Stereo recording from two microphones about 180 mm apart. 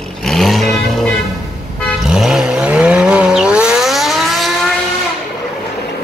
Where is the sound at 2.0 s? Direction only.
5° right (ahead or behind).